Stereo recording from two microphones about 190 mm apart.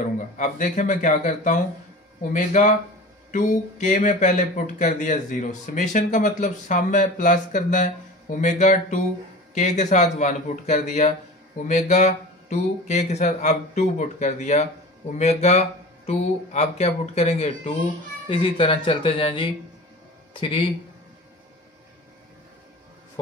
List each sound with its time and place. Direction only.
0.4 s speech: 40° left (ahead or behind)